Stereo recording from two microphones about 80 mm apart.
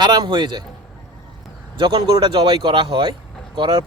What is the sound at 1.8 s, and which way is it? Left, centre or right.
Speech, right.